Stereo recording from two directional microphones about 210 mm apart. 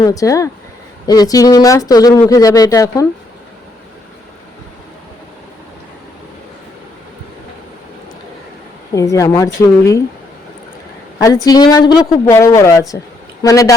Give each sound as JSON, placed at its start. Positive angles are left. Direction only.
{"t": 0.0, "sound": "speech", "side_deg": 15}
{"t": 9.0, "sound": "speech", "side_deg": 15}
{"t": 11.2, "sound": "speech", "side_deg": 15}